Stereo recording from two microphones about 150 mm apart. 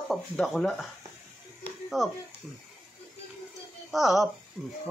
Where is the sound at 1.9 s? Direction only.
5° right (ahead or behind).